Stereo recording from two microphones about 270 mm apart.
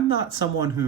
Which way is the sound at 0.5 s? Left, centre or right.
Centre.